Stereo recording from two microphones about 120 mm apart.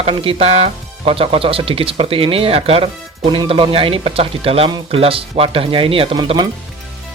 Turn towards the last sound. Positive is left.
turn(degrees=-40)  # may be behind; listen again after turning